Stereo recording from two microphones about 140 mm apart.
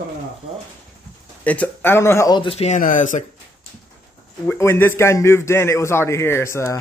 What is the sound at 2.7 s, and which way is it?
Speech, 65° left (ahead or behind).